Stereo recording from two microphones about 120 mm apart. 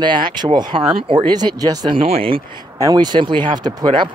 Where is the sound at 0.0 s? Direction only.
40° right (ahead or behind).